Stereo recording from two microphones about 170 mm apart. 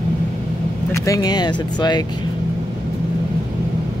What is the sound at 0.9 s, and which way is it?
Speech, 20° left (ahead or behind).